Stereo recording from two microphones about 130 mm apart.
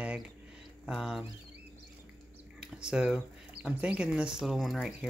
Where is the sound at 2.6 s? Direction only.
5° right (ahead or behind).